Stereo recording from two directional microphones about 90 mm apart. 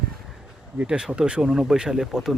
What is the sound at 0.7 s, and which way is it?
Speech, 10° right (ahead or behind).